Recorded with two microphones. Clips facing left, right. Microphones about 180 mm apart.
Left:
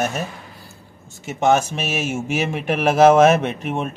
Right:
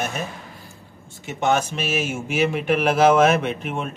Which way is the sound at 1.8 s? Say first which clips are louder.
Left 1 dB; 45° left (ahead or behind).